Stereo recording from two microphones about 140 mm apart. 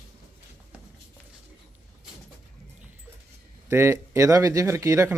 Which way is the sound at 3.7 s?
20° right (ahead or behind).